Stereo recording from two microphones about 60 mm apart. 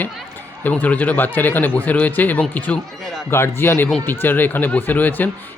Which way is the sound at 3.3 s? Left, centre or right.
Left.